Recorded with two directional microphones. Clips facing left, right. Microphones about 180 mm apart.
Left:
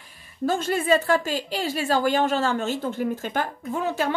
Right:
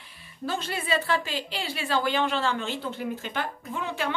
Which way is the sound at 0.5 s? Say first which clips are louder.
Left 7 dB; 45° left (ahead or behind).